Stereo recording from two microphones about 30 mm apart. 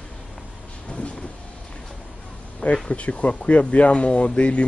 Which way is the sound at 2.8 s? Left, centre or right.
Left.